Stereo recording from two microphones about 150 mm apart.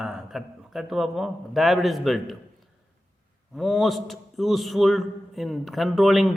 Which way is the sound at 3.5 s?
Centre (ahead or behind).